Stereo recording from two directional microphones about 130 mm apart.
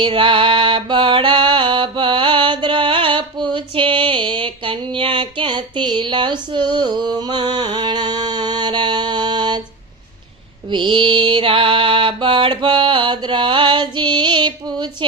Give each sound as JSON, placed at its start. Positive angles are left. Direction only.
{"t": 0.0, "sound": "mantra", "side_deg": -40}
{"t": 10.7, "sound": "mantra", "side_deg": -40}